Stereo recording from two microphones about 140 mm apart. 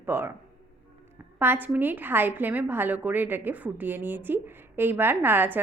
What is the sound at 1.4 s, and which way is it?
A woman's voice, 15° right (ahead or behind).